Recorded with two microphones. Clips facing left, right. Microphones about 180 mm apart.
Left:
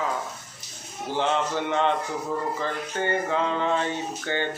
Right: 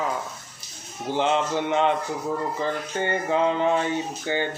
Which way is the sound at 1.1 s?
15° right (ahead or behind).